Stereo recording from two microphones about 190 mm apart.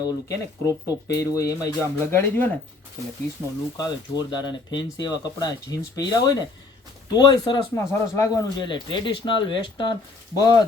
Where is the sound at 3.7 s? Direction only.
20° left (ahead or behind).